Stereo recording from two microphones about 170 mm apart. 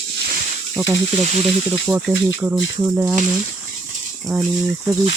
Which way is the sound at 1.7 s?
15° right (ahead or behind).